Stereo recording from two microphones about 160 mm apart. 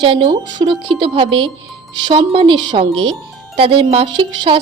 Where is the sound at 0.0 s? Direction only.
35° right (ahead or behind).